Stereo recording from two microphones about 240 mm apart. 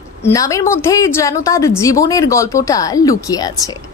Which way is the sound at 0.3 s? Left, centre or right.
Centre.